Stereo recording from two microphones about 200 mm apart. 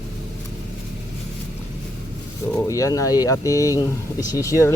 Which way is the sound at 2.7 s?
15° left (ahead or behind).